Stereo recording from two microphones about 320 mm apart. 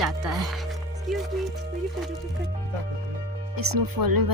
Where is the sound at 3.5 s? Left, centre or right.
Right.